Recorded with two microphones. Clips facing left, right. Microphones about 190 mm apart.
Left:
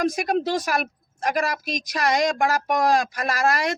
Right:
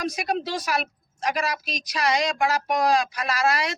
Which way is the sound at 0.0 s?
50° left (ahead or behind).